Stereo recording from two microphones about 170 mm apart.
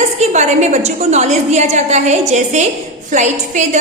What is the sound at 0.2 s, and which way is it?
A woman's voice, 40° right (ahead or behind).